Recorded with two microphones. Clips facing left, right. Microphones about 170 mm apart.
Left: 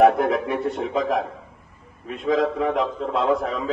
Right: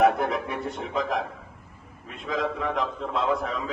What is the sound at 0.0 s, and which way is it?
A man's voice, 40° left (ahead or behind).